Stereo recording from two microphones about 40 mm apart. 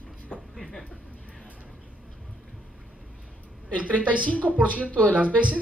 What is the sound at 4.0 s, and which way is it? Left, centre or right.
Speech, right.